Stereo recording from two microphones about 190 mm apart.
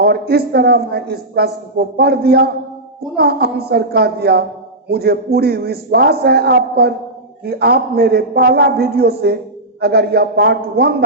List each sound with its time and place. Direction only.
0.0 s speech: 55° right (ahead or behind)